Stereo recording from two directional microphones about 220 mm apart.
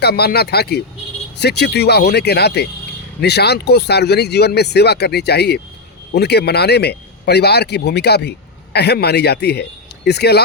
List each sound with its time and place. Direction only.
0.0 s a man's voice: 45° left (ahead or behind)